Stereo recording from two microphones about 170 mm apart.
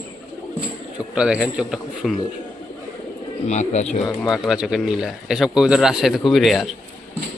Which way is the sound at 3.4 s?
40° left (ahead or behind).